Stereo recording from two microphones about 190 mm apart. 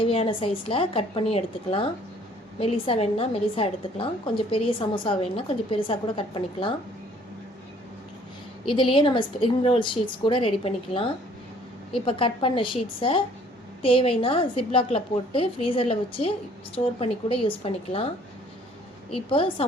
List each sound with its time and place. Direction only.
0.0 s a woman's voice: 30° left (ahead or behind)
8.6 s a woman's voice: 25° left (ahead or behind)
19.1 s a woman's voice: 30° left (ahead or behind)